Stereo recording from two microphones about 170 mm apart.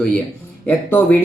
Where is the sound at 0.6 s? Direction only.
10° left (ahead or behind).